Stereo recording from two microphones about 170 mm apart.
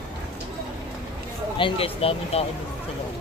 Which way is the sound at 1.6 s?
35° left (ahead or behind).